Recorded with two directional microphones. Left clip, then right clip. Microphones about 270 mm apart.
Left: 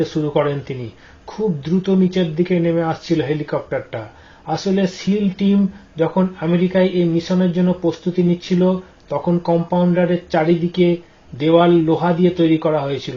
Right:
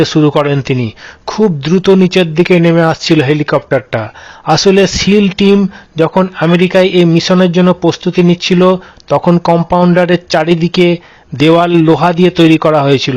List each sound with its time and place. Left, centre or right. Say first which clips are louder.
0.0 s speech: right 9 dB; right